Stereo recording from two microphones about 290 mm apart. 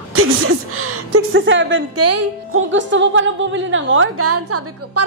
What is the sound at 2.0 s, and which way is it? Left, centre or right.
Speech, right.